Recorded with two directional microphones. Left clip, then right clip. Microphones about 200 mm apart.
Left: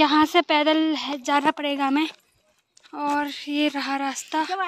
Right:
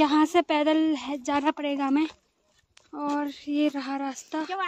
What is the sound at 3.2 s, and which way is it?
A woman's voice, 5° right (ahead or behind).